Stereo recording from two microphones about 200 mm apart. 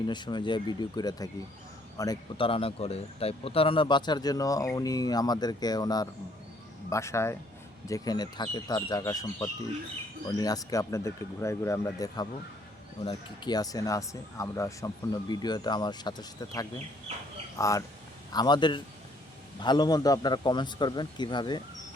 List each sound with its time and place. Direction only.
0.1 s speech: 20° left (ahead or behind)